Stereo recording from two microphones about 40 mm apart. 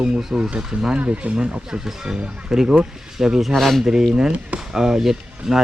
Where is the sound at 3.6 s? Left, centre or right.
Centre.